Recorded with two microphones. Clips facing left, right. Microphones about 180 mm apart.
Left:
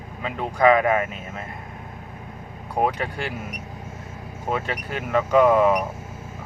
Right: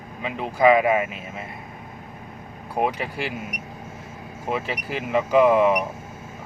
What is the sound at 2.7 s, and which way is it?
Speech, 5° right (ahead or behind).